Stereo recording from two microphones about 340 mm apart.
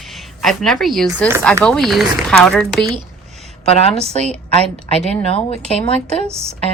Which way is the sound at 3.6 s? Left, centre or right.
Centre.